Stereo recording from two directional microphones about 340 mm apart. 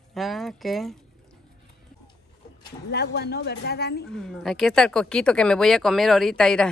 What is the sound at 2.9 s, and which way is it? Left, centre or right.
Speech, left.